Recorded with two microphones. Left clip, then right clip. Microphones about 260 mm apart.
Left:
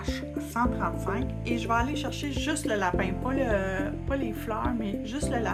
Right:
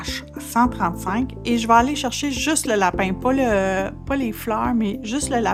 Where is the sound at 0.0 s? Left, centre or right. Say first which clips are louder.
Right 4 dB; right.